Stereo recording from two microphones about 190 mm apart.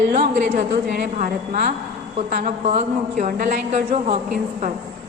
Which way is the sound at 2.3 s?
40° right (ahead or behind).